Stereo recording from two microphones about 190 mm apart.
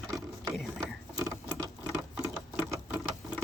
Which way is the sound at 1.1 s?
20° right (ahead or behind).